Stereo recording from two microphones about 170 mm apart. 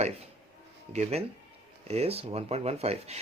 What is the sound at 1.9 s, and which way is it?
Speech, 35° right (ahead or behind).